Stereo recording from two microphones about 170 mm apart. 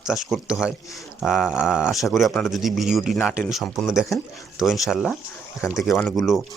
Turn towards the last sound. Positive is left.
turn(degrees=0)  # may be behind; listen again after turning